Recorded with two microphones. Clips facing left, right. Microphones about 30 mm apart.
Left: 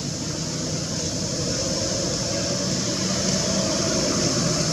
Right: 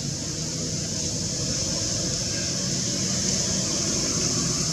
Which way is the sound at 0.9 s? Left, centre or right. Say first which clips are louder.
Left 3 dB; centre.